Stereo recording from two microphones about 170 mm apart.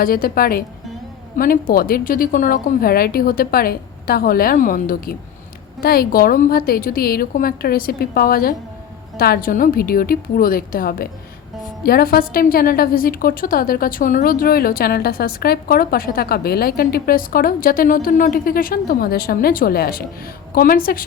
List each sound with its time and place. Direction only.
0.0 s a woman's voice: 60° left (ahead or behind)